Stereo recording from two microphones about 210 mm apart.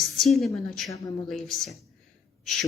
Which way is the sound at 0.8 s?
15° left (ahead or behind).